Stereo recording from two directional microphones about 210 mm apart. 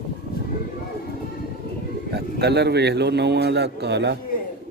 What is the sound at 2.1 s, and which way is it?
Speech, 50° right (ahead or behind).